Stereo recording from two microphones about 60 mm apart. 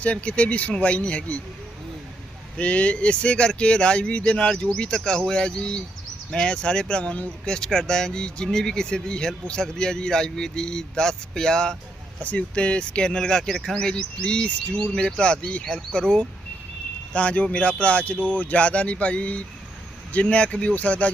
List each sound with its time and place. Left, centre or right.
0.0 s speech: left
2.6 s speech: left